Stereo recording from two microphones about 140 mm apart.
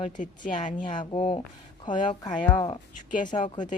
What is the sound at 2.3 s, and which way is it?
Speech, 10° left (ahead or behind).